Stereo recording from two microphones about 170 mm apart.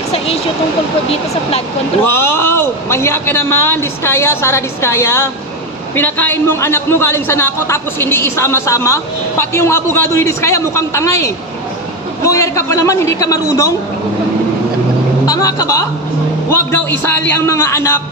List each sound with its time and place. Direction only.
2.0 s a man's voice: 15° left (ahead or behind)
15.2 s a man's voice: 20° left (ahead or behind)